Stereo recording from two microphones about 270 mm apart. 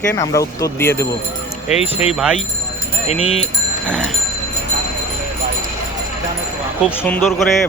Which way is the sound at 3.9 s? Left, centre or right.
Centre.